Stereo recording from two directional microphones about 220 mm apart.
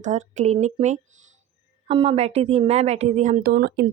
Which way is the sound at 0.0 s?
35° right (ahead or behind).